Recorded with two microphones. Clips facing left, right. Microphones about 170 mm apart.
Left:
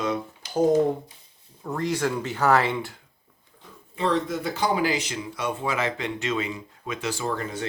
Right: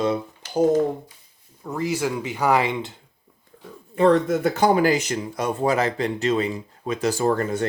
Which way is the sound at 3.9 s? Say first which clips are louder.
Right 7 dB; 50° right (ahead or behind).